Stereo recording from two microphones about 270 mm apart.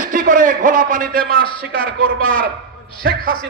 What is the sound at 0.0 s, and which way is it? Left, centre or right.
A man's voice, right.